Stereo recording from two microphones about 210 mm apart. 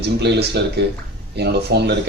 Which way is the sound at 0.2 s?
50° right (ahead or behind).